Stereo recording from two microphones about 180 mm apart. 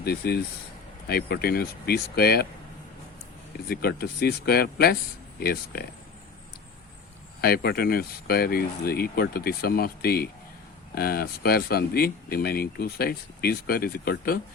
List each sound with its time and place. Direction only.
0.0 s speech: 60° left (ahead or behind)
3.7 s speech: 60° left (ahead or behind)
7.4 s speech: 60° left (ahead or behind)